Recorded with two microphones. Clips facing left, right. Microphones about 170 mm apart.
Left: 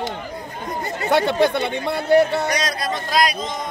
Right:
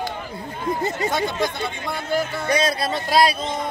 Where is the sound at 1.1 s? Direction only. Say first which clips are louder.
Left 6 dB; 65° left (ahead or behind).